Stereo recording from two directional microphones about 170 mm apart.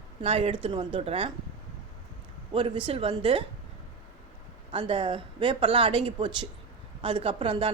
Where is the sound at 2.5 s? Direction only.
30° right (ahead or behind).